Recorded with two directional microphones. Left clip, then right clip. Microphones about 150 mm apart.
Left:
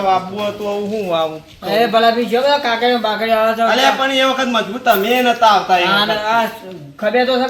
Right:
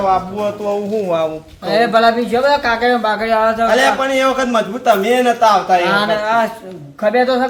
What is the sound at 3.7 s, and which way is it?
A man's voice, 40° right (ahead or behind).